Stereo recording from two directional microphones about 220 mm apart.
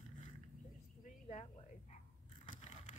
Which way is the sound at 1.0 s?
35° left (ahead or behind).